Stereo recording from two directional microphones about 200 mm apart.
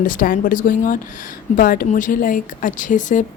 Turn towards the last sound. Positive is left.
turn(degrees=40)  # may be behind; listen again after turning